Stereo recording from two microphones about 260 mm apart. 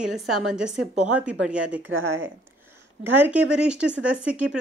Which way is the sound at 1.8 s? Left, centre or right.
Right.